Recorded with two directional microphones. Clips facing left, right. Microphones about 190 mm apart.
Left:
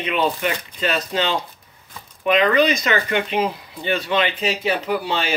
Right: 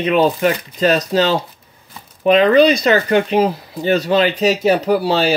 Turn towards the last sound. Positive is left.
turn(degrees=-35)  # may be behind; listen again after turning